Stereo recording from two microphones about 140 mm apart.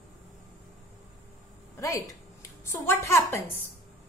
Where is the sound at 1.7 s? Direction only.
20° left (ahead or behind).